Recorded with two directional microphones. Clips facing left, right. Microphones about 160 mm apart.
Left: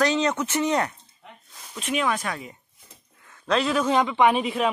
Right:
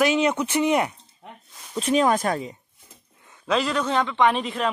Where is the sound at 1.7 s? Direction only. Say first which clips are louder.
Right 6 dB; 35° right (ahead or behind).